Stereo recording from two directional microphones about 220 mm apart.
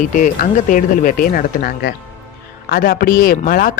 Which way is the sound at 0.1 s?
35° left (ahead or behind).